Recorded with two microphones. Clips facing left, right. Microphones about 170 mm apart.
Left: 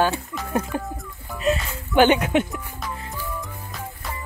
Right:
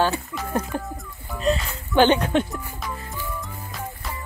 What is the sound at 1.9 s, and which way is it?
Speech, 10° left (ahead or behind).